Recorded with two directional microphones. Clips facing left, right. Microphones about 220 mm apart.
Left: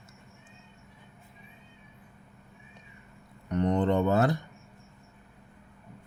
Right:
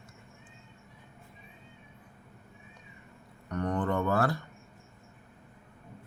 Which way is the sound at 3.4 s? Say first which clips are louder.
Left 5 dB; 20° left (ahead or behind).